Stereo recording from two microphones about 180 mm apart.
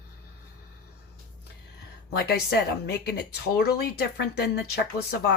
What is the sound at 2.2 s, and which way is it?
Speech, 65° left (ahead or behind).